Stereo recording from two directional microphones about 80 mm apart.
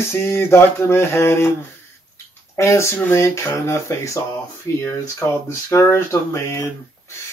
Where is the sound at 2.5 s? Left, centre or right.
Left.